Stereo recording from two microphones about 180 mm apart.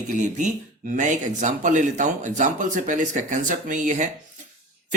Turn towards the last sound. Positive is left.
turn(degrees=-45)  # may be behind; listen again after turning